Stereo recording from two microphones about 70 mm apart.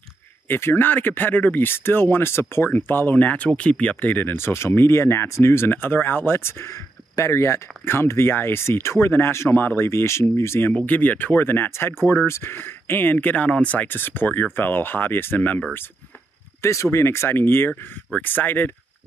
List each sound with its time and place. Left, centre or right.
0.5 s speech: left
10.9 s speech: left
16.6 s speech: left